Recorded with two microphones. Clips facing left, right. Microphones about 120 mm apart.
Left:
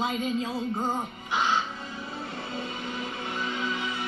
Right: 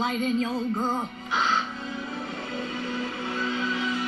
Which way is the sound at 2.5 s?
15° left (ahead or behind).